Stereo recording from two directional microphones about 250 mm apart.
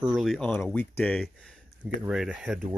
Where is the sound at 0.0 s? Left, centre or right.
Centre.